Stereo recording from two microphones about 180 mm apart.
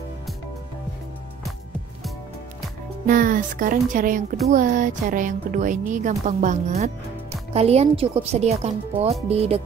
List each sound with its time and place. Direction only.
3.1 s speech: 50° right (ahead or behind)